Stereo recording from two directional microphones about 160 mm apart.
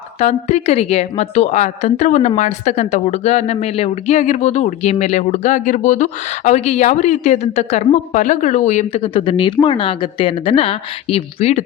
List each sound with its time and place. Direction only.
0.2 s a woman's voice: 45° left (ahead or behind)